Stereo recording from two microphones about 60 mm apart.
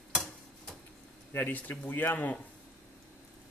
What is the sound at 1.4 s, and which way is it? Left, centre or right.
Speech, left.